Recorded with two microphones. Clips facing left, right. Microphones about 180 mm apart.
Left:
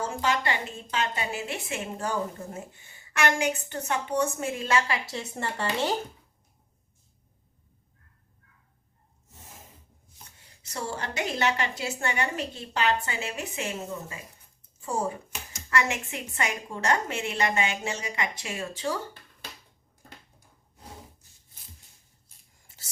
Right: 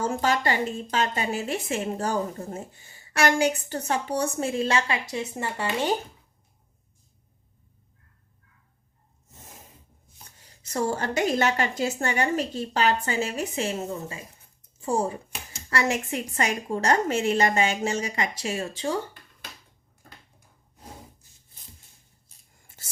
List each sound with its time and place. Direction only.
0.2 s a woman's voice: 40° right (ahead or behind)
5.1 s speech: 10° right (ahead or behind)
10.7 s a woman's voice: 45° right (ahead or behind)